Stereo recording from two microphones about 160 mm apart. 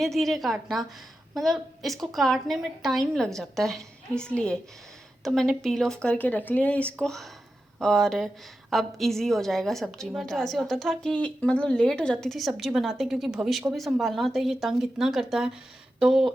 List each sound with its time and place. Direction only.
0.0 s a woman's voice: centre (ahead or behind)